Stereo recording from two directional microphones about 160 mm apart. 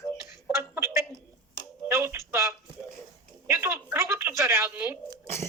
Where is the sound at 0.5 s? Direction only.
15° right (ahead or behind).